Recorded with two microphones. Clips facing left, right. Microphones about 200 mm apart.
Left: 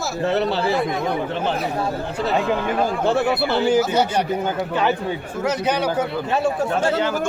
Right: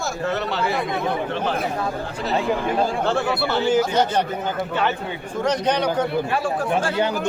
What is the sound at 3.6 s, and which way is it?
Speech, 10° left (ahead or behind).